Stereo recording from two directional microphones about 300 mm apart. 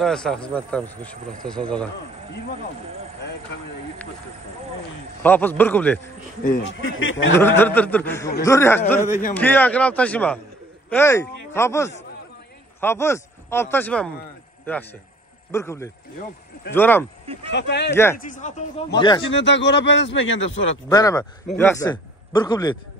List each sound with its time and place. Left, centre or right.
0.0 s speech: centre
5.2 s speech: centre
6.4 s speech: left
7.3 s speech: centre
17.5 s speech: left
18.9 s speech: centre
19.3 s speech: left
20.7 s a man's voice: centre